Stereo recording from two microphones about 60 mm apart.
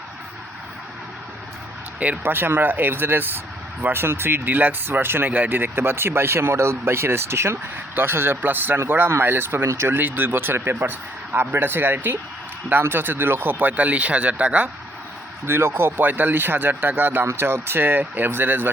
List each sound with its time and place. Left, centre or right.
2.2 s speech: right
10.0 s speech: right
15.4 s speech: right
16.0 s speech: right
17.2 s speech: right